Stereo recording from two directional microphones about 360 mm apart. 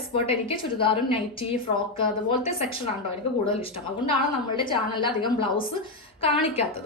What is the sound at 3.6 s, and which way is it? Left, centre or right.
A woman's voice, centre.